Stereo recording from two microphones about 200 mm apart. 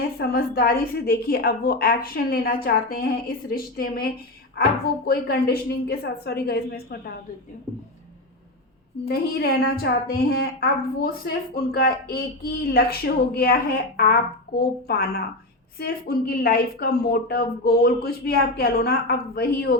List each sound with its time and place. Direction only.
0.2 s a woman's voice: 50° left (ahead or behind)
9.0 s a woman's voice: 50° left (ahead or behind)